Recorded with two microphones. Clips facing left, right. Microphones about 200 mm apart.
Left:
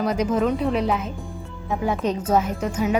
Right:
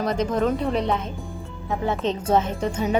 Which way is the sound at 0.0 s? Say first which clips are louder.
Left 1 dB; 10° left (ahead or behind).